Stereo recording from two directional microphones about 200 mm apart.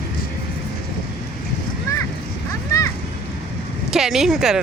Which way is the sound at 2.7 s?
15° left (ahead or behind).